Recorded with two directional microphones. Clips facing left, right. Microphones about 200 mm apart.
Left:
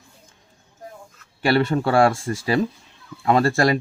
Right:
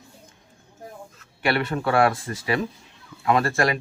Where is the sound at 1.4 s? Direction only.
30° left (ahead or behind).